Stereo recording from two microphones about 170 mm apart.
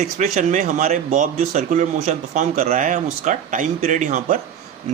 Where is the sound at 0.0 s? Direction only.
45° right (ahead or behind).